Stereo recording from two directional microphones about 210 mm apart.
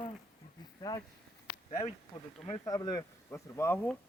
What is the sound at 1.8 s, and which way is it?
Speech, 30° left (ahead or behind).